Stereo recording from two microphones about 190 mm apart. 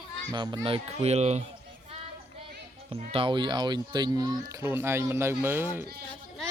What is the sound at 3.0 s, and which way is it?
Speech, 30° right (ahead or behind).